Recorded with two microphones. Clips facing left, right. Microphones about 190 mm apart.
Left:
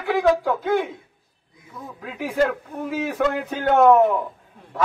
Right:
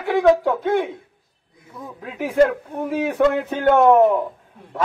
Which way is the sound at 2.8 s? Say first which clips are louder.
Right 4 dB; 30° right (ahead or behind).